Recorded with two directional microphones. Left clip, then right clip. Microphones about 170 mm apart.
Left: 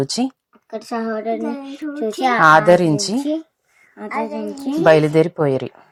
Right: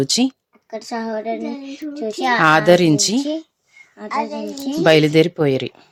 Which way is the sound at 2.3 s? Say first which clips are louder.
Left 2 dB; 20° right (ahead or behind).